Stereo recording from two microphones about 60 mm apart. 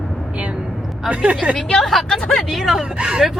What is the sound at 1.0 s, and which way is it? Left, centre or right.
Speech, right.